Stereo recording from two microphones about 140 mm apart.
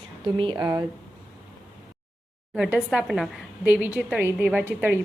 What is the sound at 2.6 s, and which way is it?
Speech, 5° right (ahead or behind).